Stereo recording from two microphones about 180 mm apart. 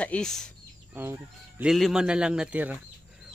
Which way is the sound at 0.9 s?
10° right (ahead or behind).